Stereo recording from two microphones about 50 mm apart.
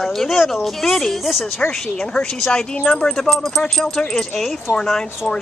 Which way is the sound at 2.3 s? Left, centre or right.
Centre.